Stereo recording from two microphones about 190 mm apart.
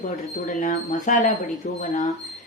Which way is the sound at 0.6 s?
45° left (ahead or behind).